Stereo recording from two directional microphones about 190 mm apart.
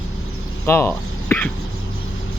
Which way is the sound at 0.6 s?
10° left (ahead or behind).